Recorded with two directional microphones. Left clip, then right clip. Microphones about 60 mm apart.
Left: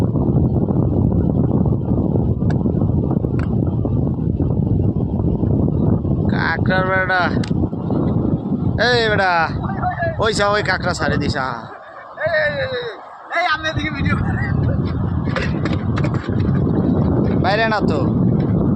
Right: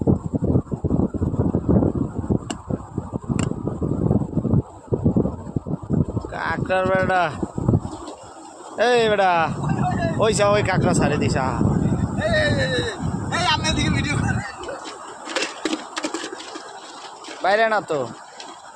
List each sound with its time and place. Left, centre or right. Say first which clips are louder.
6.7 s speech: even; centre
8.8 s speech: left 1 dB; right
12.2 s a sound: left 3 dB; right
17.4 s speech: right 1 dB; centre